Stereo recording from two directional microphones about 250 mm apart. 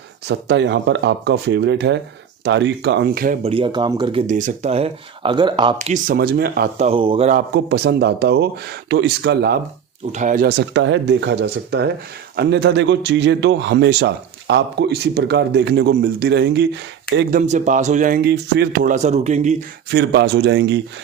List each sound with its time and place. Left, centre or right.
0.3 s a man's voice: right
3.4 s speech: right
4.3 s speech: right
7.5 s speech: right
10.1 s a man's voice: right
17.4 s speech: right
19.9 s a man's voice: right